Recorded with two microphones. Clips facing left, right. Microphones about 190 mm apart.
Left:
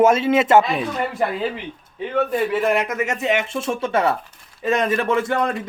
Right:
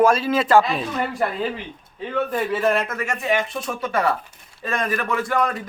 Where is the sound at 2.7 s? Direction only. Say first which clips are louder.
Left 2 dB; 15° left (ahead or behind).